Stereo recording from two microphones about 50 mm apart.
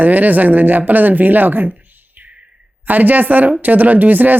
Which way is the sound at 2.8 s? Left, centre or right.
Right.